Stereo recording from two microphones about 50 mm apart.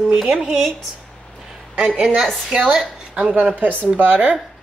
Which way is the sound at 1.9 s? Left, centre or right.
Centre.